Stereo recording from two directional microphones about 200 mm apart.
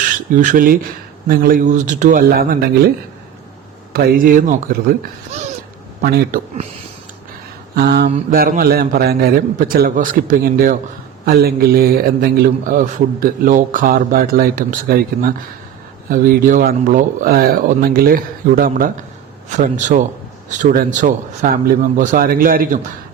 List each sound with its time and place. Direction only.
0.3 s a man's voice: 40° right (ahead or behind)
3.9 s a man's voice: 45° right (ahead or behind)
7.8 s a man's voice: 55° right (ahead or behind)